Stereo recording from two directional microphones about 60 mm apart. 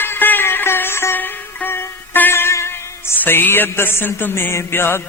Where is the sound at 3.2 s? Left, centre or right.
Left.